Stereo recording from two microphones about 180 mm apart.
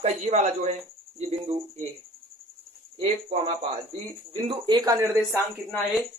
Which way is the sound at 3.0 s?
35° right (ahead or behind).